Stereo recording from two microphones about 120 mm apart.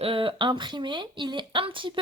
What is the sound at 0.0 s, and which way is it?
Speech, 50° right (ahead or behind).